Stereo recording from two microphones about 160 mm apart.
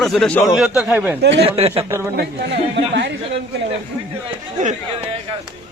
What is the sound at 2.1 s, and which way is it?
Speech, 90° right.